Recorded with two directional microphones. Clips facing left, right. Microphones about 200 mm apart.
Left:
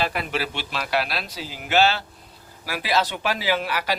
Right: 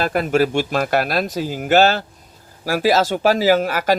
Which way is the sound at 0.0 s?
45° right (ahead or behind).